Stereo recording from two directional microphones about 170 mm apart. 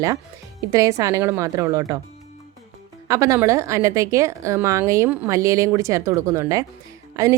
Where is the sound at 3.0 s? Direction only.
20° right (ahead or behind).